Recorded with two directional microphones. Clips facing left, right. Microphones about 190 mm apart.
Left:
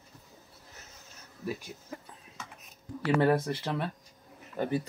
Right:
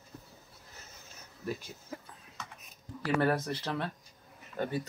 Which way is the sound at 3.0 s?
15° left (ahead or behind).